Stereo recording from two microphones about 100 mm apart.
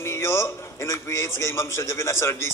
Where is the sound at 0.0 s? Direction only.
25° left (ahead or behind).